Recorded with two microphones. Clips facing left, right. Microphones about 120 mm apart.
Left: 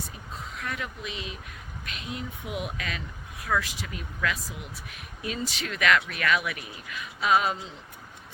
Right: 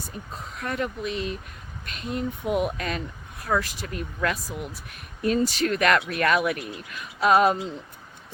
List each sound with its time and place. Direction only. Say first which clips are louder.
0.6 s speech: right 8 dB; 45° right (ahead or behind)